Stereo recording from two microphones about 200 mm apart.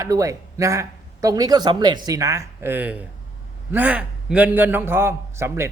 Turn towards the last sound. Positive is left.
turn(degrees=-15)  # may be behind; listen again after turning